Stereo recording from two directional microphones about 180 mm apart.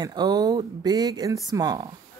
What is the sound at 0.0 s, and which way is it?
Speech, 20° right (ahead or behind).